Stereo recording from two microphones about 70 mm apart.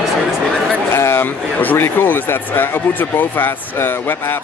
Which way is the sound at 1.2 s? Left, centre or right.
Left.